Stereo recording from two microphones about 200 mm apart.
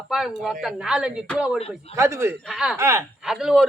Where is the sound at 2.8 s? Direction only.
15° right (ahead or behind).